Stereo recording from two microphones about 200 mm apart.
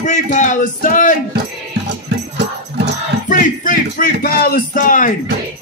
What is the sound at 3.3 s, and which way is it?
Speech, 45° left (ahead or behind).